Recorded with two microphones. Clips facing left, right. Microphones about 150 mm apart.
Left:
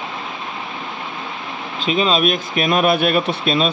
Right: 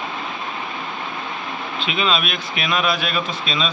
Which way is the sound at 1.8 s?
40° left (ahead or behind).